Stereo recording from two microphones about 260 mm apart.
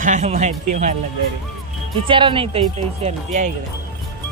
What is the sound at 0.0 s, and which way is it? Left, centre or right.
Speech, right.